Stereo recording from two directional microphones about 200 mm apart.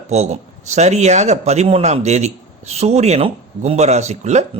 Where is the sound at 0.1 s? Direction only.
35° right (ahead or behind).